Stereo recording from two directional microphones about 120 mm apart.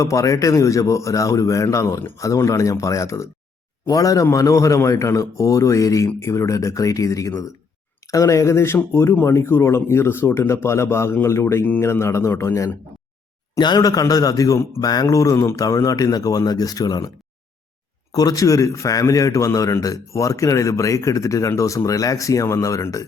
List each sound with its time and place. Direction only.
0.0 s a man's voice: 25° left (ahead or behind)
13.6 s speech: 35° left (ahead or behind)
18.1 s a man's voice: 30° left (ahead or behind)